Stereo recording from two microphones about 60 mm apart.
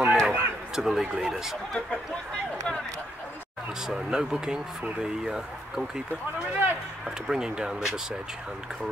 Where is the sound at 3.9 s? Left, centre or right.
Centre.